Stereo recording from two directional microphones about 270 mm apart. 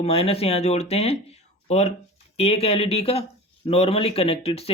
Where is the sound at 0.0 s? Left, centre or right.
Left.